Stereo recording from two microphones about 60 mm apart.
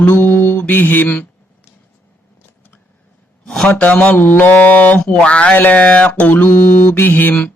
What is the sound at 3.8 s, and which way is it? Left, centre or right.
Speech, left.